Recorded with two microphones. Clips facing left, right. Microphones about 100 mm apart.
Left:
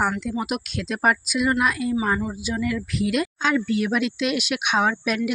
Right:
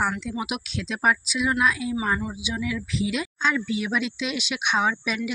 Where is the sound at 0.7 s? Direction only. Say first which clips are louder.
Left 1 dB; 50° left (ahead or behind).